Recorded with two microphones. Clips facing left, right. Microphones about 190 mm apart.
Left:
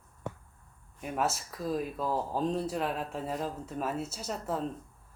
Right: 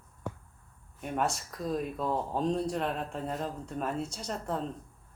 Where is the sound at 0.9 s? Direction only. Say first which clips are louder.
Even; 5° left (ahead or behind).